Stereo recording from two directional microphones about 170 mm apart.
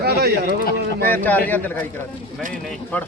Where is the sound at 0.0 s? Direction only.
70° right (ahead or behind).